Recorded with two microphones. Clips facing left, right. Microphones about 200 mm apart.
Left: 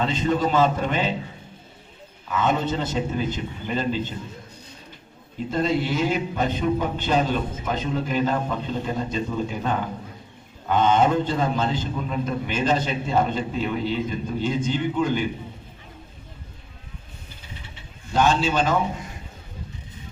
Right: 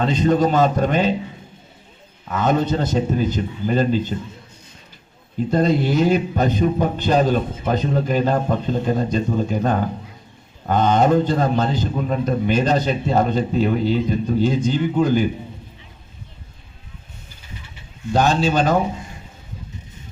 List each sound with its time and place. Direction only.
0.0 s a man's voice: 40° right (ahead or behind)
2.3 s a man's voice: 40° right (ahead or behind)
5.5 s a man's voice: 40° right (ahead or behind)
18.1 s a man's voice: 35° right (ahead or behind)